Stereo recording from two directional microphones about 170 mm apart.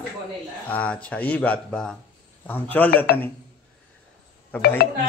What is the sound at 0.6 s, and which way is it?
Speech, 10° left (ahead or behind).